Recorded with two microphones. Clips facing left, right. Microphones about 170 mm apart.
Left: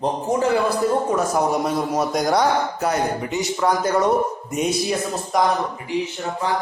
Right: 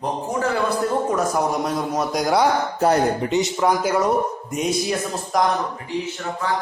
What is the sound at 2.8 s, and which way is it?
Speech, 25° right (ahead or behind).